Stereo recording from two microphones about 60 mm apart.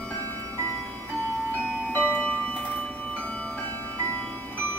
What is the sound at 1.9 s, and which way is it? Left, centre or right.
Music, left.